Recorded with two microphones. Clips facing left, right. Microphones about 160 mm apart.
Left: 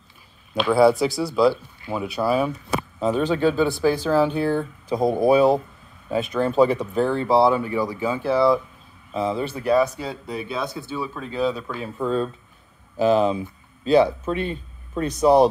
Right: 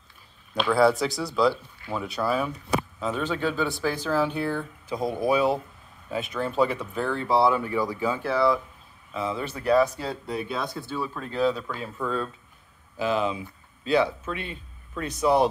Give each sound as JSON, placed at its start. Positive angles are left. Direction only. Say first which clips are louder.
{"t": 0.7, "sound": "speech", "louder": "left 4 dB", "side_deg": 10}
{"t": 3.0, "sound": "speech", "louder": "left 7 dB", "side_deg": 35}
{"t": 5.0, "sound": "speech", "louder": "left 7 dB", "side_deg": 40}
{"t": 9.7, "sound": "speech", "louder": "left 1 dB", "side_deg": 5}
{"t": 12.9, "sound": "speech", "louder": "left 7 dB", "side_deg": 35}